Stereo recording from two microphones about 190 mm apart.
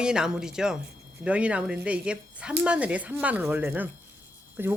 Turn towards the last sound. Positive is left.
turn(degrees=-10)  # may be behind; listen again after turning